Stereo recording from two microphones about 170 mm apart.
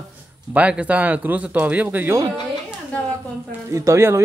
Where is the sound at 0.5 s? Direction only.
10° right (ahead or behind).